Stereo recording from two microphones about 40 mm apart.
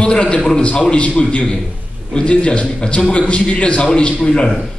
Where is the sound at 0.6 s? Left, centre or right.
Left.